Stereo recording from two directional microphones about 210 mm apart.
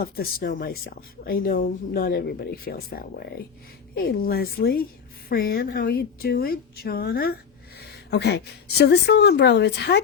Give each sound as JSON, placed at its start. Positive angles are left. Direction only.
{"t": 0.0, "sound": "speech", "side_deg": 45}
{"t": 7.9, "sound": "a sound", "side_deg": 55}
{"t": 8.8, "sound": "speech", "side_deg": 55}